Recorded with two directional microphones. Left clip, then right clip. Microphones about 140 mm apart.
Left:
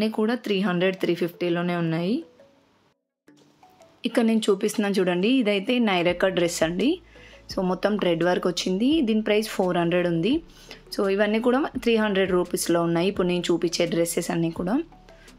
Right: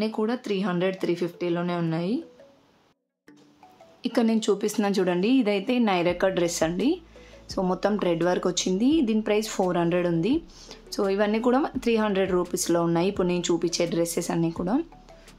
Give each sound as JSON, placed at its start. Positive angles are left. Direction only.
{"t": 0.0, "sound": "speech", "side_deg": 15}
{"t": 4.0, "sound": "speech", "side_deg": 10}